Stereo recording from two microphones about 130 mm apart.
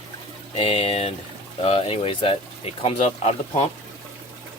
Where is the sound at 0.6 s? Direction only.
50° left (ahead or behind).